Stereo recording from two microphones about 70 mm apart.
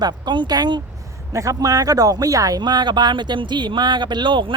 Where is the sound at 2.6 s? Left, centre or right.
Right.